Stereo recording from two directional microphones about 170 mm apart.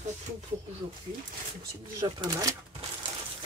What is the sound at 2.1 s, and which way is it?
Speech, 25° right (ahead or behind).